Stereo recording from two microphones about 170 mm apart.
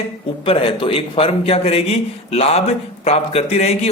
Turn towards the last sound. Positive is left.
turn(degrees=40)  # may be behind; listen again after turning